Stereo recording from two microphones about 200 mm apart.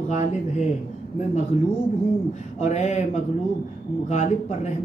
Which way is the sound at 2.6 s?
35° left (ahead or behind).